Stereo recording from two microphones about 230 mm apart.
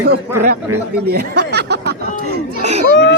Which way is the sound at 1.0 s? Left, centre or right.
Right.